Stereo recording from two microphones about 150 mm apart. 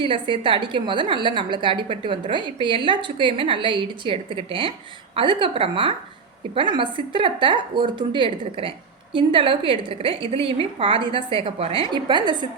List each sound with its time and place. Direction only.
0.0 s a woman's voice: 35° right (ahead or behind)